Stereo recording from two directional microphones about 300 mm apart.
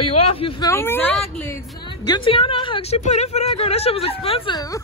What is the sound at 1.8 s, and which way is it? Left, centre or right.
A woman's voice, centre.